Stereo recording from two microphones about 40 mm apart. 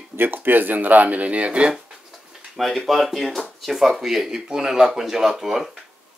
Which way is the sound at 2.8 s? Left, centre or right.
Centre.